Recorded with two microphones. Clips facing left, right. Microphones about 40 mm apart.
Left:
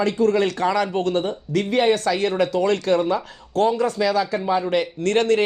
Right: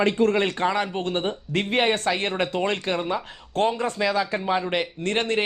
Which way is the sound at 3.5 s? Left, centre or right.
Right.